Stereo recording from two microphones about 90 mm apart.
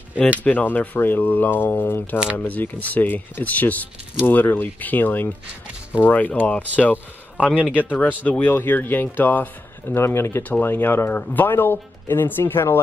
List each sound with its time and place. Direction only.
0.4 s a man's voice: 15° left (ahead or behind)